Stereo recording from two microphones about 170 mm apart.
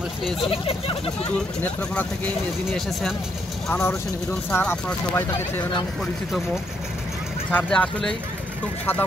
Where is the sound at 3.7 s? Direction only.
15° left (ahead or behind).